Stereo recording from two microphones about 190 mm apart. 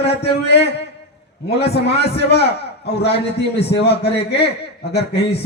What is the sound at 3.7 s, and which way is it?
A man's voice, 60° left (ahead or behind).